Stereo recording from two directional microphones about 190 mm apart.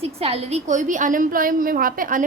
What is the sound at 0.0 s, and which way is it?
A woman's voice, 30° right (ahead or behind).